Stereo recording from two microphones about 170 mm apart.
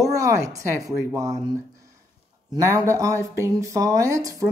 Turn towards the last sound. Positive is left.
turn(degrees=-20)  # may be behind; listen again after turning